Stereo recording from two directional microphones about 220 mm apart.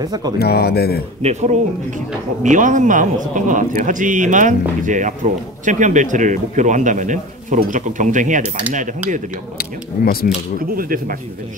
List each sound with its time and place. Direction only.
0.0 s speech: 15° right (ahead or behind)
0.4 s speech: 45° left (ahead or behind)
1.2 s speech: 30° right (ahead or behind)
10.3 s speech: 40° left (ahead or behind)
10.8 s speech: 40° right (ahead or behind)